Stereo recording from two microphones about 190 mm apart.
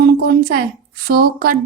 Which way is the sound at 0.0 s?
55° right (ahead or behind).